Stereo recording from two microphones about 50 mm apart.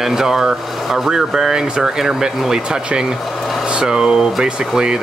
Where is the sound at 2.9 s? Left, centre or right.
Centre.